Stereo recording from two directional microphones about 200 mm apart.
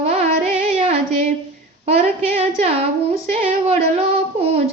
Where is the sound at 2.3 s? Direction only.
30° right (ahead or behind).